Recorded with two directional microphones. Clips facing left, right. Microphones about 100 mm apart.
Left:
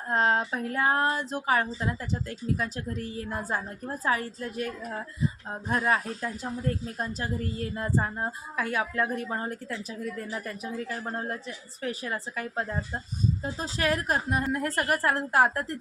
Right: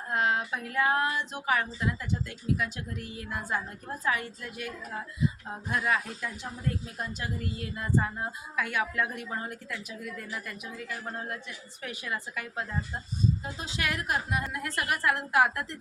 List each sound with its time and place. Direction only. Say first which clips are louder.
0.1 s speech: left 3 dB; 35° left (ahead or behind)